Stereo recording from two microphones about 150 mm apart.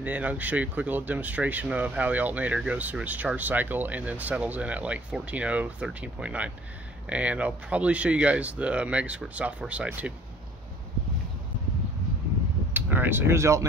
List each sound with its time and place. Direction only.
0.0 s speech: 10° right (ahead or behind)
12.7 s speech: 15° right (ahead or behind)